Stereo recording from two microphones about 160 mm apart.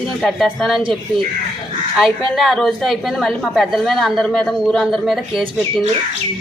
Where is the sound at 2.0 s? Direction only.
Centre (ahead or behind).